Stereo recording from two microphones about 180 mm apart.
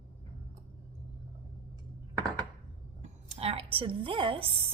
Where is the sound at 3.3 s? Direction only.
35° right (ahead or behind).